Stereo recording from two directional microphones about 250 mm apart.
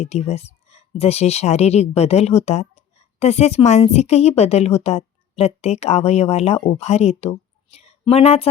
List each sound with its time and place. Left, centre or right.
0.0 s speech: left